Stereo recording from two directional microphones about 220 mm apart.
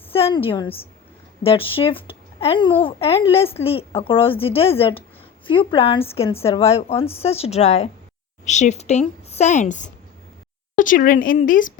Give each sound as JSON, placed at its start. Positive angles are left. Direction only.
{"t": 0.1, "sound": "a woman's voice", "side_deg": 25}